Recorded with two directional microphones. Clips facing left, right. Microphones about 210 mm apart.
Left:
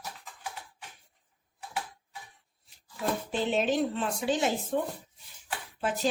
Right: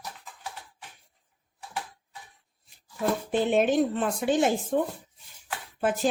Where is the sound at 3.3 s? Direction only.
55° right (ahead or behind).